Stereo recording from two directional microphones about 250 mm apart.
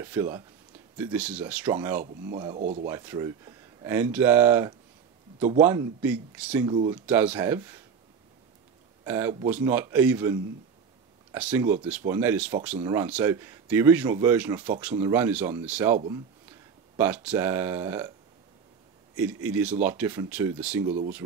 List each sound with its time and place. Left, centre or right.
0.0 s speech: centre
2.3 s speech: centre
9.0 s speech: centre
19.1 s speech: centre